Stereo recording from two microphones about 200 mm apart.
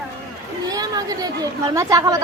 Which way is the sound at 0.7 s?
20° right (ahead or behind).